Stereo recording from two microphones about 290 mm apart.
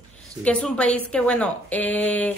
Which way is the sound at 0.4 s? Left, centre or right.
Centre.